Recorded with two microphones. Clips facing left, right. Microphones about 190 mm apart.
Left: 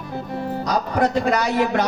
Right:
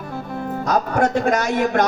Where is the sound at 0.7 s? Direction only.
45° right (ahead or behind).